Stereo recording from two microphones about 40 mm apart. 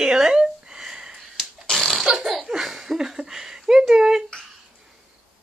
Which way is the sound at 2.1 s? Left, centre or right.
Centre.